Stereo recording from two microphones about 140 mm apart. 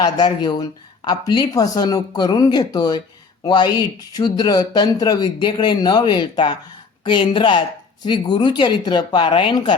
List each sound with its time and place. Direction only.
0.0 s speech: 30° left (ahead or behind)